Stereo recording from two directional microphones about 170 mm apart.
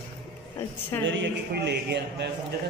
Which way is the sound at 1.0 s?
75° right (ahead or behind).